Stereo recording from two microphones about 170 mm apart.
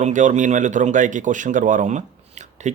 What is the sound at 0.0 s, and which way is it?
A man's voice, 45° right (ahead or behind).